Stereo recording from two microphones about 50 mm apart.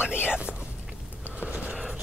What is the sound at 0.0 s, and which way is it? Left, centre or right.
Whispering, right.